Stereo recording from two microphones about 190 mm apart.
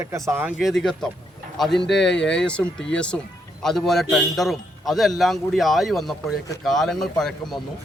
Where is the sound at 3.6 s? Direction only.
Centre (ahead or behind).